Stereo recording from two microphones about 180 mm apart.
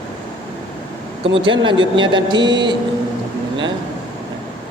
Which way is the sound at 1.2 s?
30° right (ahead or behind).